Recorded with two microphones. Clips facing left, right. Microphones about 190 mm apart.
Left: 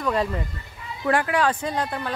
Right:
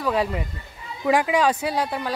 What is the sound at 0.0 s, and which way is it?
A woman's voice, 5° right (ahead or behind).